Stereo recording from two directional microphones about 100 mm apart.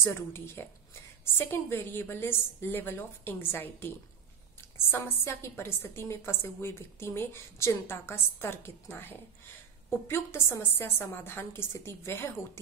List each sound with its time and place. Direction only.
0.0 s a woman's voice: 25° left (ahead or behind)